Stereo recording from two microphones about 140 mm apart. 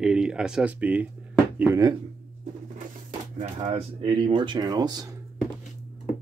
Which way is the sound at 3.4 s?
50° right (ahead or behind).